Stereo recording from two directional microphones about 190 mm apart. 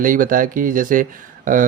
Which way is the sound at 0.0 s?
45° right (ahead or behind).